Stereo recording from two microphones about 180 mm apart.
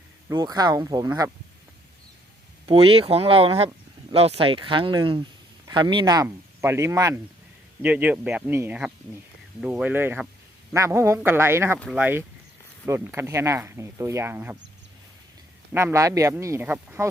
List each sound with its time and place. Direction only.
0.3 s speech: 20° right (ahead or behind)
2.6 s speech: 30° right (ahead or behind); by 14.6 s 15° right (ahead or behind)
15.7 s speech: 15° right (ahead or behind)